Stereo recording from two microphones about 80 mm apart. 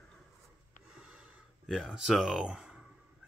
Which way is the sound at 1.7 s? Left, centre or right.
Centre.